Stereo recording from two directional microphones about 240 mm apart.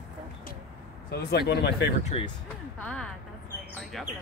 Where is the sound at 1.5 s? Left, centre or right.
Left.